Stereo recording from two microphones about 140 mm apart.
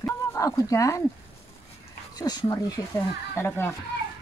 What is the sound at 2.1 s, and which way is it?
Speech, 30° left (ahead or behind).